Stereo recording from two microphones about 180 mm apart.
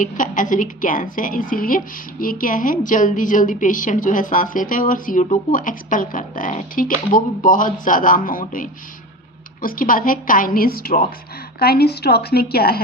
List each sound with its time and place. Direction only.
0.0 s a woman's voice: 45° left (ahead or behind)